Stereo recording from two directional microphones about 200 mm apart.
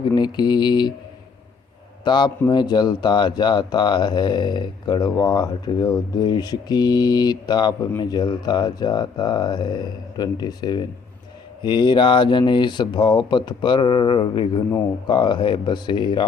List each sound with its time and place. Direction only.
0.0 s speech: 20° left (ahead or behind)
2.0 s speech: 25° left (ahead or behind)